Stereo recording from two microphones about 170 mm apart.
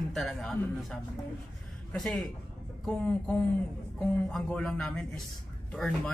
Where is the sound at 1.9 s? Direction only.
Centre (ahead or behind).